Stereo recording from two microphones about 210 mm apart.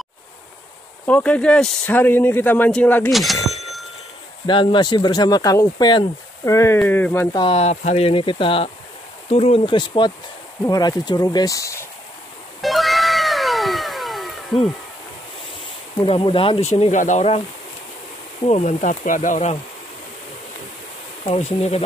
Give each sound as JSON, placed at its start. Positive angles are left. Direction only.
{"t": 1.0, "sound": "speech", "side_deg": 5}
{"t": 4.5, "sound": "speech", "side_deg": 25}
{"t": 7.3, "sound": "speech", "side_deg": 25}
{"t": 12.6, "sound": "cat", "side_deg": 0}
{"t": 16.0, "sound": "speech", "side_deg": 25}
{"t": 18.4, "sound": "speech", "side_deg": 35}
{"t": 21.2, "sound": "speech", "side_deg": 30}